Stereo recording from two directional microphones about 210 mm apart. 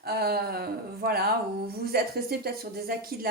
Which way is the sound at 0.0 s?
50° right (ahead or behind).